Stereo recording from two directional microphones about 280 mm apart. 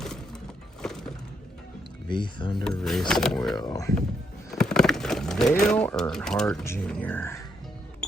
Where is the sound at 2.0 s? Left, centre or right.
Centre.